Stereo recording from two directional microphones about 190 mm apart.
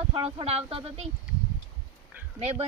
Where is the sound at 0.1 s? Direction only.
30° right (ahead or behind).